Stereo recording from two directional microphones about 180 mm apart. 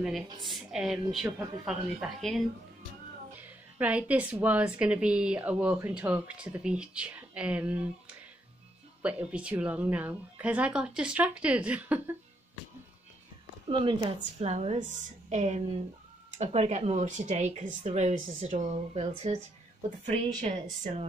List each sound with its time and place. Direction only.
0.5 s a woman's voice: centre (ahead or behind)
9.0 s a woman's voice: 5° right (ahead or behind)
13.7 s speech: 30° right (ahead or behind); by 20.6 s 45° right (ahead or behind)